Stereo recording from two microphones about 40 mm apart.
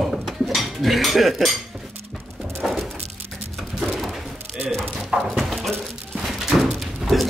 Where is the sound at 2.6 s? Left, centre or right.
Centre.